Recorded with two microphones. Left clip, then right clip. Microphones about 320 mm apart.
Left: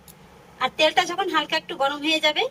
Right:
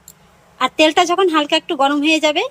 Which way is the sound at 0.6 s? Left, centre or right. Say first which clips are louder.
Right 7 dB; centre.